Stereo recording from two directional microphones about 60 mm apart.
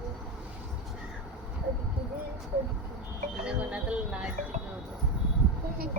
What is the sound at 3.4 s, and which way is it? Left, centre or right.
Music, centre.